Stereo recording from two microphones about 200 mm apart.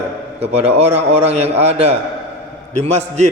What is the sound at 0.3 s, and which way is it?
A man's voice, 30° right (ahead or behind).